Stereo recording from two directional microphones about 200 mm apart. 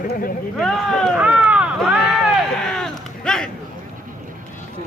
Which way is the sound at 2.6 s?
Centre (ahead or behind).